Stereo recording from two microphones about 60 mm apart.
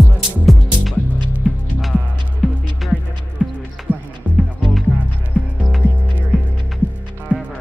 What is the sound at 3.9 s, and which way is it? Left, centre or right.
Music, left.